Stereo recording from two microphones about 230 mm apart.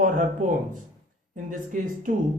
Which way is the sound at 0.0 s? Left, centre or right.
Right.